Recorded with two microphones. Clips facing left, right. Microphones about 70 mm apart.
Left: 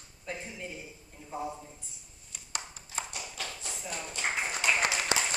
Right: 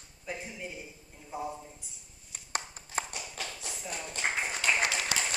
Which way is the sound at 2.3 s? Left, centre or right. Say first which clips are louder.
Right 4 dB; right.